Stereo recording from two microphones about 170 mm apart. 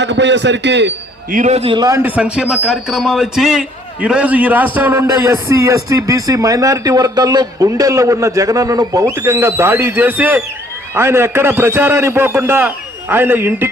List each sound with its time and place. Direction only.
0.0 s a man's voice: 90° right
1.3 s a man's voice: 45° right (ahead or behind); by 2.0 s 25° right (ahead or behind)
2.0 s speech: 10° right (ahead or behind)